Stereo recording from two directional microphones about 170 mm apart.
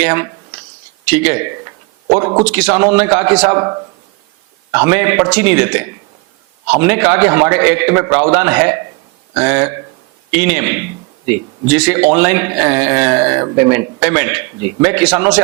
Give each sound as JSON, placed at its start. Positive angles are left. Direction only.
{"t": 0.0, "sound": "a man's voice", "side_deg": -10}
{"t": 2.0, "sound": "a man's voice", "side_deg": -20}
{"t": 2.4, "sound": "a man's voice", "side_deg": -5}